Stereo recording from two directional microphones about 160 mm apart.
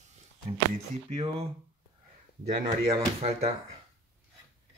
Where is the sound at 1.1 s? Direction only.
45° right (ahead or behind).